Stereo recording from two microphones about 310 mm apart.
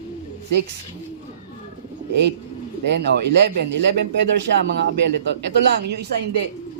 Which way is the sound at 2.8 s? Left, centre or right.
Right.